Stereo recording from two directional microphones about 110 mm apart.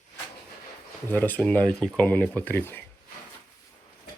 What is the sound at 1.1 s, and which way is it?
Speech, 15° left (ahead or behind).